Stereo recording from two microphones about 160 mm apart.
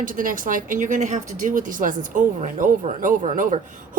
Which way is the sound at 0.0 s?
55° right (ahead or behind).